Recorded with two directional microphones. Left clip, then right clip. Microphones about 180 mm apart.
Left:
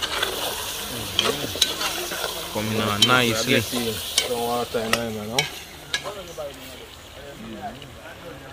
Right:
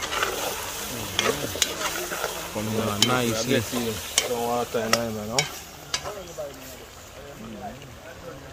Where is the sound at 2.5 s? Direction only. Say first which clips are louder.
Left 4 dB; centre (ahead or behind).